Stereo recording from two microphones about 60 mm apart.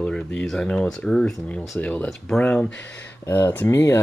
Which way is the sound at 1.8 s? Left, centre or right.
Left.